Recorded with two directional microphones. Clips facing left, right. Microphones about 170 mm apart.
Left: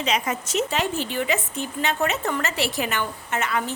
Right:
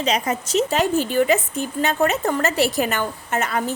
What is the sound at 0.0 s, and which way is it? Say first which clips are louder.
Speech: right 3 dB; 35° right (ahead or behind).